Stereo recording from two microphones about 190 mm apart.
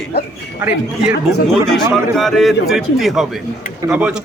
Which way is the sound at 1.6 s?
Centre (ahead or behind).